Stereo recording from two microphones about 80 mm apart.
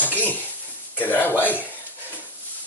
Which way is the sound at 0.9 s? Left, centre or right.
Left.